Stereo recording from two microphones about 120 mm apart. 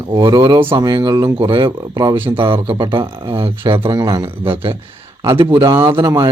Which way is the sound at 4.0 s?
35° right (ahead or behind).